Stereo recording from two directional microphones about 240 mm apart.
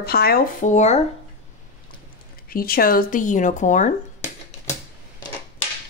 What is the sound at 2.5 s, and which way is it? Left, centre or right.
Speech, left.